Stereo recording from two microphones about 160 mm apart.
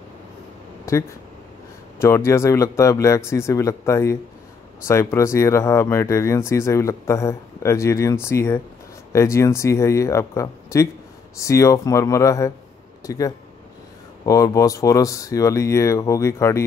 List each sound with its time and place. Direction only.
2.0 s speech: 15° left (ahead or behind)